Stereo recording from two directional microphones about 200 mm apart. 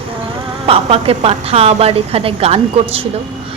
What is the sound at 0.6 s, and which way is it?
A woman's voice, 30° right (ahead or behind).